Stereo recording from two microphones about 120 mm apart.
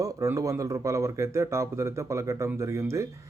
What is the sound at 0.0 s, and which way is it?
Speech, 30° right (ahead or behind).